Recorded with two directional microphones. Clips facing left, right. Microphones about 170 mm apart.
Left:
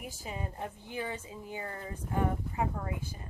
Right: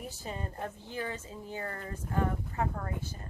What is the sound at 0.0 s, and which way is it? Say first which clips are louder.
A woman's voice: right 1 dB; 10° left (ahead or behind).